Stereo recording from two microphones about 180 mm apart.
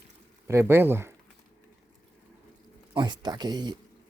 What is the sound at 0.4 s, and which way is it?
Speech, 15° right (ahead or behind).